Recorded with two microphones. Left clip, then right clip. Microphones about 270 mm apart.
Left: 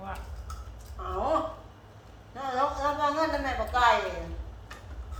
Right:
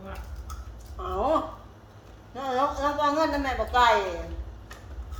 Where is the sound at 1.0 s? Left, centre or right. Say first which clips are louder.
Right 3 dB; right.